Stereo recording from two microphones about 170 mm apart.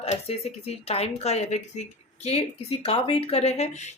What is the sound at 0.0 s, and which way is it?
Speech, 35° left (ahead or behind).